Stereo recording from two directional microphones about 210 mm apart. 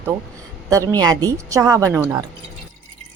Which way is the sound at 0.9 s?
20° right (ahead or behind).